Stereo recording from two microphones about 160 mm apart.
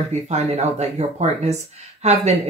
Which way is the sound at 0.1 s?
45° right (ahead or behind).